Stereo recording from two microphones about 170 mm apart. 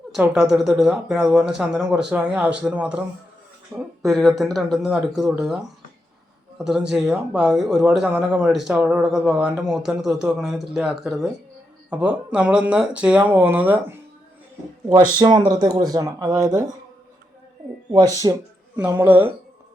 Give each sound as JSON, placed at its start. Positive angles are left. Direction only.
{"t": 0.1, "sound": "speech", "side_deg": -5}
{"t": 6.7, "sound": "speech", "side_deg": -5}
{"t": 15.2, "sound": "speech", "side_deg": -25}
{"t": 17.9, "sound": "speech", "side_deg": -20}